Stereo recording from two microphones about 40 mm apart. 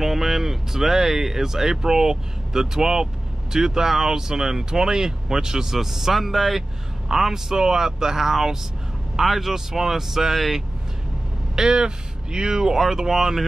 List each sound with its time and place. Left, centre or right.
0.0 s speech: centre
11.5 s speech: centre